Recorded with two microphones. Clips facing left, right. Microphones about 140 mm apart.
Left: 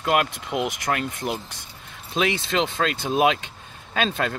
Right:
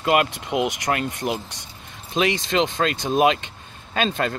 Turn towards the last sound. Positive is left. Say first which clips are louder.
# right 1 dB
turn(degrees=0)  # may be behind; listen again after turning